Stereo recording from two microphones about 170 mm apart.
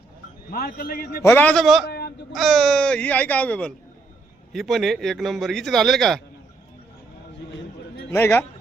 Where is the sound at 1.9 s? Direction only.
70° left (ahead or behind).